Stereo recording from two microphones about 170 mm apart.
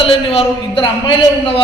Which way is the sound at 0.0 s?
35° left (ahead or behind).